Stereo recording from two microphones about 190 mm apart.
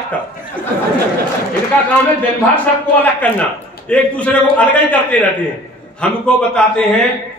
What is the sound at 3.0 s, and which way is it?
A man's voice, 10° left (ahead or behind).